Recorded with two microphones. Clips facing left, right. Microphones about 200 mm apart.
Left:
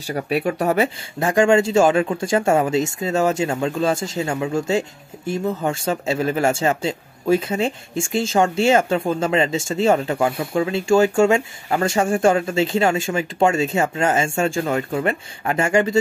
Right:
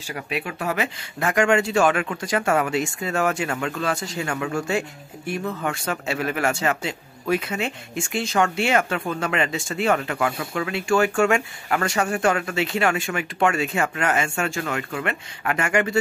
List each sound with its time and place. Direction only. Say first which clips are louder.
0.1 s speech: left 8 dB; 35° left (ahead or behind)